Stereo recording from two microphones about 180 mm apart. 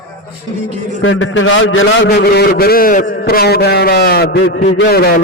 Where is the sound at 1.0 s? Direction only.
90° left.